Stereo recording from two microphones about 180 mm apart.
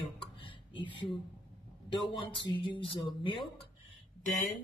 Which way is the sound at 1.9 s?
25° left (ahead or behind).